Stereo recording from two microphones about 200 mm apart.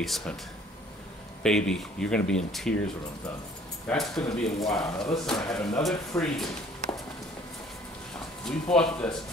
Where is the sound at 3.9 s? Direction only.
5° left (ahead or behind).